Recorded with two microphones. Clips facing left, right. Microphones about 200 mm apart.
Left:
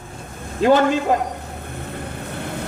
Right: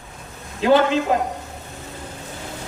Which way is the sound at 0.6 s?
45° left (ahead or behind).